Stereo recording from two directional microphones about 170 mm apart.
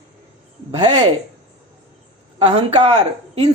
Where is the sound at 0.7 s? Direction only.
25° right (ahead or behind).